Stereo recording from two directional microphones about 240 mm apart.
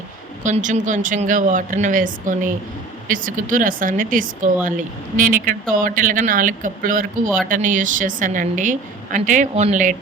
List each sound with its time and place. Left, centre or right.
0.4 s a woman's voice: right